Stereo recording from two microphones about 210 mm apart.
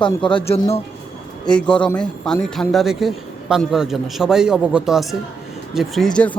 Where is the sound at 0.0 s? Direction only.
25° left (ahead or behind).